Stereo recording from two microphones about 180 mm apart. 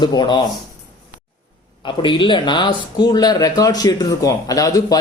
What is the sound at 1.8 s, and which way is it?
Speech, 25° left (ahead or behind).